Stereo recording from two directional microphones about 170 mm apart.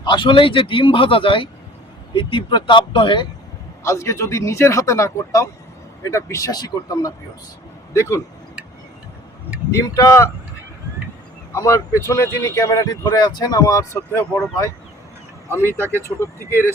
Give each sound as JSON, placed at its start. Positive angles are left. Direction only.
{"t": 0.0, "sound": "a man's voice", "side_deg": 25}
{"t": 3.8, "sound": "speech", "side_deg": 15}
{"t": 9.8, "sound": "speech", "side_deg": 20}
{"t": 11.5, "sound": "speech", "side_deg": 15}